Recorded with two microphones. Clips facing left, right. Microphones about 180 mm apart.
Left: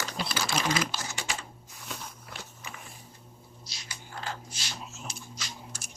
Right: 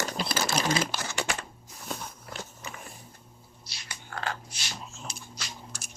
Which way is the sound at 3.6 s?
65° right (ahead or behind).